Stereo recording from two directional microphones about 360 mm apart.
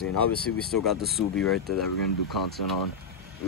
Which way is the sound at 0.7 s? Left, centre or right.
Centre.